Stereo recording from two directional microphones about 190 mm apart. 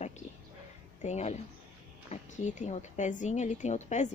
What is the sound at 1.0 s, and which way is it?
A woman's voice, 35° left (ahead or behind).